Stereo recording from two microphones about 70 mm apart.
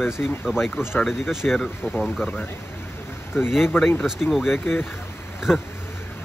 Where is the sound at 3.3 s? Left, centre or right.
Centre.